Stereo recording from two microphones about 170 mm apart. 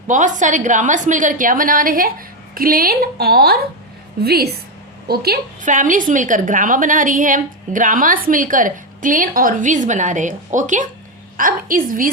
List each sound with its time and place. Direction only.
0.1 s a woman's voice: 50° right (ahead or behind); by 5.7 s 65° right (ahead or behind)
5.7 s a woman's voice: 50° right (ahead or behind)